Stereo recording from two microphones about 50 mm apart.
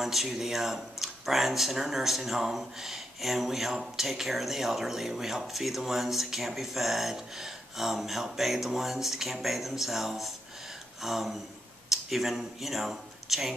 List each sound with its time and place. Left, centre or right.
0.0 s speech: centre